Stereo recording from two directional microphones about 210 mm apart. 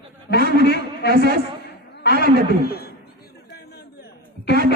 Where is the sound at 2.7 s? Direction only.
45° left (ahead or behind).